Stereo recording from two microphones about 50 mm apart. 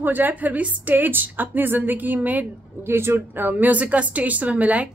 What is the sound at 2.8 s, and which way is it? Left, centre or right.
Speech, right.